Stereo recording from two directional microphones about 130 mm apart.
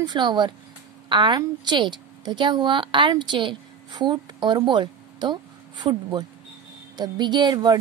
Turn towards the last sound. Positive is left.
turn(degrees=-35)  # may be behind; listen again after turning